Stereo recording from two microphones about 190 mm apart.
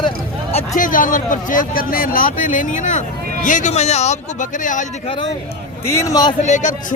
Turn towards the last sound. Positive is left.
turn(degrees=40)  # may be behind; listen again after turning